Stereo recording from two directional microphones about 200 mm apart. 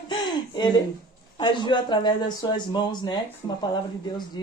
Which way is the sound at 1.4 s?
25° left (ahead or behind).